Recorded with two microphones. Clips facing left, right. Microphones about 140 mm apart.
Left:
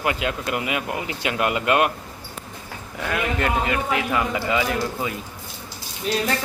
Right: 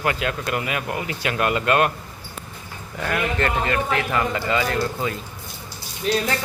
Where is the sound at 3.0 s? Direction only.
5° left (ahead or behind).